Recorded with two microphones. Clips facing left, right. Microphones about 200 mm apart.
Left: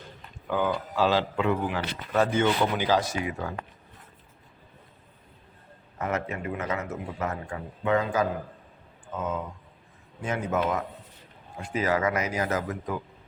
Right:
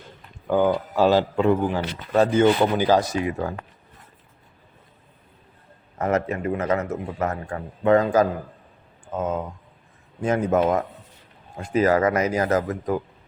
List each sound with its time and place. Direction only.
0.4 s speech: 45° right (ahead or behind)
6.0 s a man's voice: 40° right (ahead or behind)
10.2 s a man's voice: 45° right (ahead or behind)